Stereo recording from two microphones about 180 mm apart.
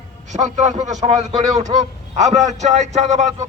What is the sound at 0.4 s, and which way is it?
Speech, 40° right (ahead or behind).